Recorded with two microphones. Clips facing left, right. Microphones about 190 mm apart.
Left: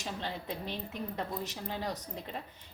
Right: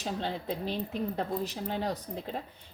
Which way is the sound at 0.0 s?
35° right (ahead or behind).